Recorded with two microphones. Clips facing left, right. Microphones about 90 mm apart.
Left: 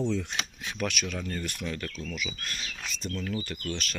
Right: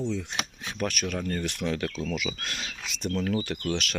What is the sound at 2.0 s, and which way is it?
Speech, 90° right.